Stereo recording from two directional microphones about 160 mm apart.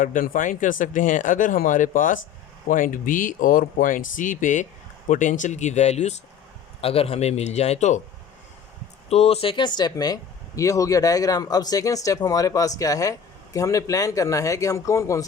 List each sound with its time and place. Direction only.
0.0 s a man's voice: 55° left (ahead or behind)
9.0 s speech: 40° left (ahead or behind); by 15.3 s 20° left (ahead or behind)